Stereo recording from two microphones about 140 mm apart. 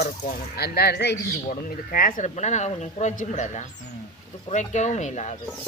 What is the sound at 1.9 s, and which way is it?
Speech, 85° left.